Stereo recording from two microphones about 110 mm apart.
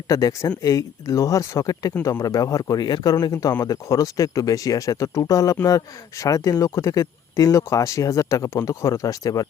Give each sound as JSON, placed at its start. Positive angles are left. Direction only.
{"t": 0.1, "sound": "speech", "side_deg": 30}